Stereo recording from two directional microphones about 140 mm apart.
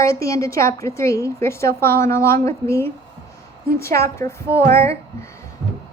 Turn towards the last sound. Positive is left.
turn(degrees=20)  # may be behind; listen again after turning